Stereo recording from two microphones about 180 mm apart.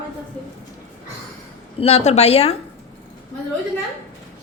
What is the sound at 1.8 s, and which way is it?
Speech, 35° left (ahead or behind).